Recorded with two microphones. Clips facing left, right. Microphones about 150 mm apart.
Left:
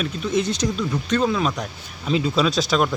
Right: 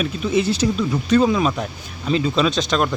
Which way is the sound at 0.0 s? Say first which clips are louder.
Right 3 dB; 5° right (ahead or behind).